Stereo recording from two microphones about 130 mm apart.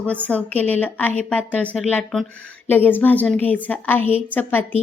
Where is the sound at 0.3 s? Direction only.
10° left (ahead or behind).